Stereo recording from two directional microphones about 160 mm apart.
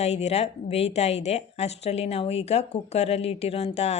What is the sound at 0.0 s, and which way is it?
A woman's voice, 45° left (ahead or behind).